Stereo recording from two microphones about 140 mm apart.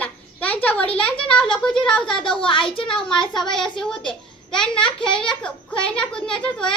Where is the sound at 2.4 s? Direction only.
40° left (ahead or behind).